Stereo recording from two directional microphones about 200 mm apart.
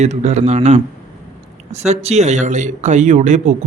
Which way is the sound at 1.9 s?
30° right (ahead or behind).